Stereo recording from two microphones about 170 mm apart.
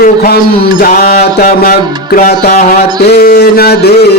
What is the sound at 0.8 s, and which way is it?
Music, 65° left (ahead or behind).